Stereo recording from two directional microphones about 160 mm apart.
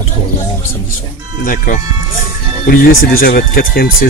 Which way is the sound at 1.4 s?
55° left (ahead or behind).